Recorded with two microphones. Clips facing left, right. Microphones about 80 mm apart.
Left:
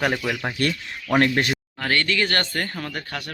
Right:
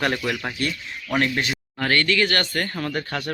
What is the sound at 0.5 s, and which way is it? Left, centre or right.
Speech, left.